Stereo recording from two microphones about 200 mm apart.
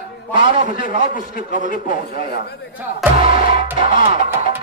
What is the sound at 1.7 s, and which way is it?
Speech, 45° left (ahead or behind).